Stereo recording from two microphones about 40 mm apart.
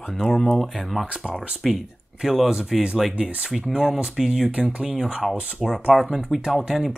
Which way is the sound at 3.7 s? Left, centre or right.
Centre.